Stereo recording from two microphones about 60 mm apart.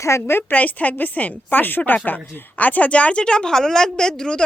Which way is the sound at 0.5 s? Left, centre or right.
Left.